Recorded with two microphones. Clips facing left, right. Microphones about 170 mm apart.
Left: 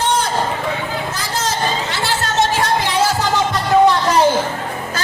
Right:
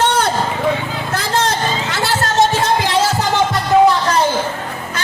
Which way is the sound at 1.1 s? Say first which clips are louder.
Right 4 dB; 60° right (ahead or behind).